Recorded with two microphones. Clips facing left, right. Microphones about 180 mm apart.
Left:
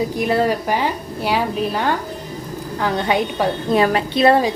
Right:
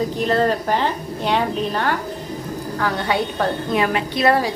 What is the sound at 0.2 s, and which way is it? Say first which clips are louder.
A woman's voice: even; 10° left (ahead or behind).